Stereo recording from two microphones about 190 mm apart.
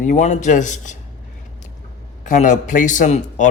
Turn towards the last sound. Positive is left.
turn(degrees=40)  # may be behind; listen again after turning